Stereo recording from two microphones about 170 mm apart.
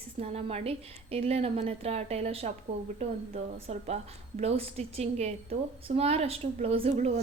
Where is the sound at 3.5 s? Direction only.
35° right (ahead or behind).